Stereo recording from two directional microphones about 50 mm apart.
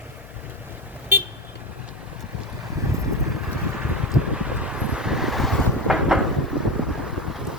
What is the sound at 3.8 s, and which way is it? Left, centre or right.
Vehicle, centre.